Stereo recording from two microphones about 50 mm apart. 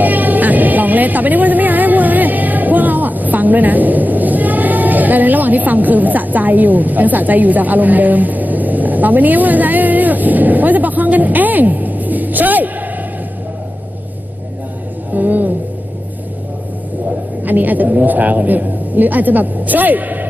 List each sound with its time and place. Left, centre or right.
0.0 s music: right
15.1 s a sound: right
17.4 s a woman's voice: right